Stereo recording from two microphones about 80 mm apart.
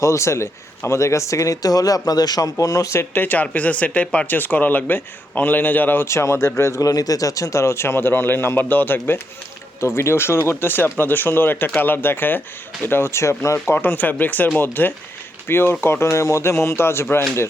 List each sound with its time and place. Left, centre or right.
0.0 s speech: left
3.2 s speech: left
13.7 s speech: left